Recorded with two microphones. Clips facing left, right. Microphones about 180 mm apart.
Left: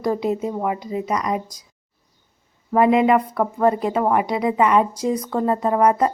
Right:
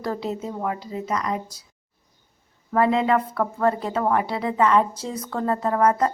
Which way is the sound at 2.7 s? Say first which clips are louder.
Left 4 dB; 15° left (ahead or behind).